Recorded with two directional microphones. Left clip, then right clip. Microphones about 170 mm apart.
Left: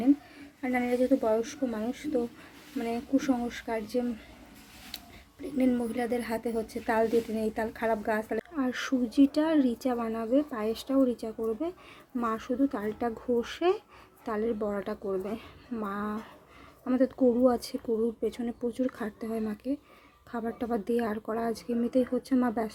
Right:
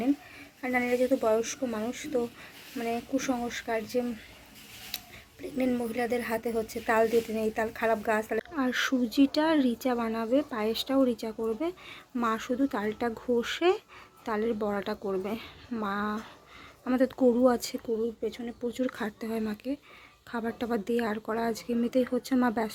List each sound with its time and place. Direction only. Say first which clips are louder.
0.6 s speech: right 1 dB; 5° left (ahead or behind)
5.4 s speech: left 1 dB; 10° left (ahead or behind)
18.2 s speech: left 2 dB; 20° left (ahead or behind)
18.6 s speech: right 1 dB; centre (ahead or behind)